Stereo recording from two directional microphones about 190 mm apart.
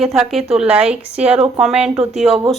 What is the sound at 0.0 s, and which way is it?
A woman's voice, centre (ahead or behind).